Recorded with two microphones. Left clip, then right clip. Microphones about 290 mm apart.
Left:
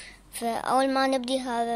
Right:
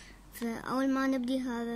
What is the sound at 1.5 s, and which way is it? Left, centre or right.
Speech, left.